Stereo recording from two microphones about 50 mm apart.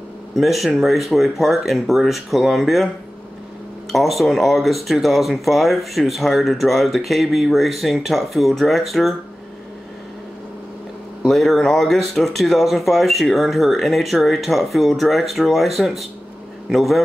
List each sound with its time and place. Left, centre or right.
0.4 s speech: centre
3.9 s speech: centre
11.2 s speech: centre